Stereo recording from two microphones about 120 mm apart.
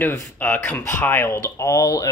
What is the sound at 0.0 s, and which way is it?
Speech, 20° left (ahead or behind).